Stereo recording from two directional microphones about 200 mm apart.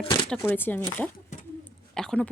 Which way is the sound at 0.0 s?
25° left (ahead or behind).